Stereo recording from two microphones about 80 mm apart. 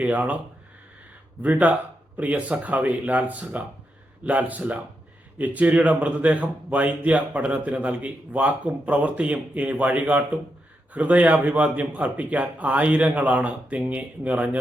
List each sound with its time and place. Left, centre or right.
0.0 s speech: centre
1.4 s speech: centre